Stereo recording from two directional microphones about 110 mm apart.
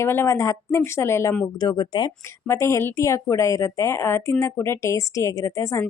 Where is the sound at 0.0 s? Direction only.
25° left (ahead or behind).